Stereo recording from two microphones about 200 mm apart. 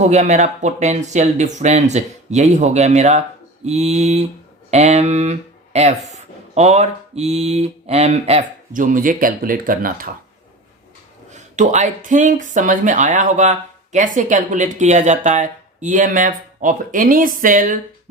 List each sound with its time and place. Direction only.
0.0 s speech: 35° right (ahead or behind)
11.3 s speech: 35° right (ahead or behind)